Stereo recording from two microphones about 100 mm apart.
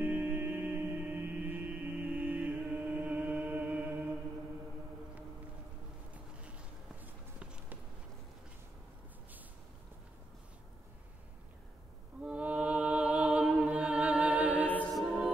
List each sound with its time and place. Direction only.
0.0 s music: 20° right (ahead or behind)
7.0 s walk: 10° right (ahead or behind)
12.2 s music: 10° right (ahead or behind)
15.0 s music: centre (ahead or behind)